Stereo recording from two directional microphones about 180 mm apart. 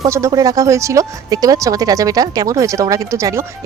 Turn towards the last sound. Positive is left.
turn(degrees=-15)  # may be behind; listen again after turning